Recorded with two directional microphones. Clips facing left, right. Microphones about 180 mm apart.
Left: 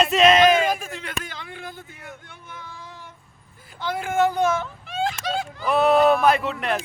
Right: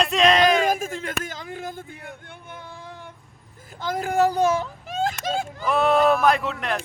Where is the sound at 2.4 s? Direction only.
55° right (ahead or behind).